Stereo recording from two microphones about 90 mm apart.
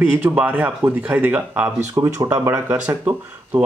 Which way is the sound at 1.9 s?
35° right (ahead or behind).